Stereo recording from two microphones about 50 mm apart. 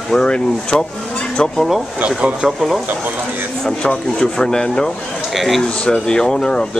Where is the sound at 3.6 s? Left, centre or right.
Centre.